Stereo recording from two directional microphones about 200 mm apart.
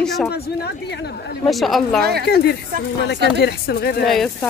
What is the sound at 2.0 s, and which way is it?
Speech, 50° right (ahead or behind).